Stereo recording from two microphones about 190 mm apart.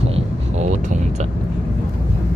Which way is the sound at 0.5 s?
40° right (ahead or behind).